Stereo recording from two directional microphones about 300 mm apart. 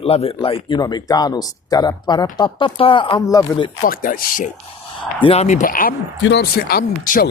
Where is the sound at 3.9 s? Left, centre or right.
Left.